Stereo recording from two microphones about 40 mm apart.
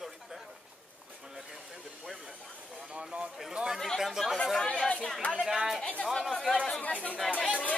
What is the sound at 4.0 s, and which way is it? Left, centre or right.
Speech, centre.